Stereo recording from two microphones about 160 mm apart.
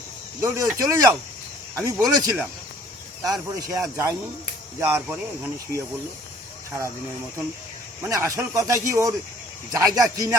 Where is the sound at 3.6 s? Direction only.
20° right (ahead or behind).